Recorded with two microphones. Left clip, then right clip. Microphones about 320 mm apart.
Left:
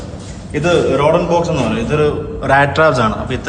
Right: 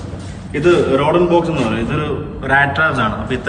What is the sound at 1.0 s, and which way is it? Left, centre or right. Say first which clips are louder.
A man's voice: left 1 dB; centre.